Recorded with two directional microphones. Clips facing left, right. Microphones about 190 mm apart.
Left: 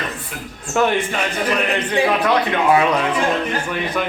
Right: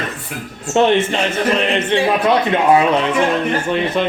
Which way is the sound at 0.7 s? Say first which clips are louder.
Right 4 dB; 25° right (ahead or behind).